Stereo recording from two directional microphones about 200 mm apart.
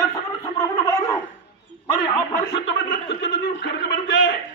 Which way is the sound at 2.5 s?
65° left (ahead or behind).